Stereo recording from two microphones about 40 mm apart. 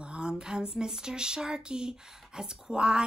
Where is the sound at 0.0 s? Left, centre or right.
Right.